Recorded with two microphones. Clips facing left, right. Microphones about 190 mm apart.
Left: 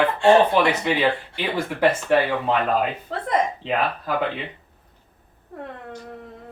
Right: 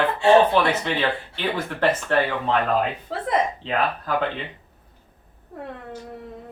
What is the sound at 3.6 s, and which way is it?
Speech, 10° left (ahead or behind).